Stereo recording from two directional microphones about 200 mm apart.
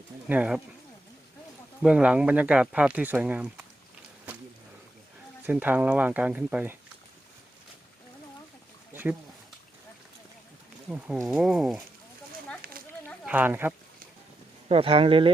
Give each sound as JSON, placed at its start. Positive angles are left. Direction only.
{"t": 0.3, "sound": "speech", "side_deg": -5}
{"t": 1.8, "sound": "speech", "side_deg": -5}
{"t": 5.5, "sound": "speech", "side_deg": -10}
{"t": 8.9, "sound": "a sound", "side_deg": -10}
{"t": 10.8, "sound": "speech", "side_deg": -5}
{"t": 12.8, "sound": "a sound", "side_deg": -45}
{"t": 13.2, "sound": "speech", "side_deg": -10}
{"t": 14.7, "sound": "speech", "side_deg": -30}